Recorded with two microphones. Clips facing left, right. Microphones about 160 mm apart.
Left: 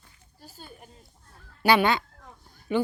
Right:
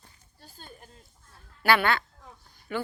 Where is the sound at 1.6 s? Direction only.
15° left (ahead or behind).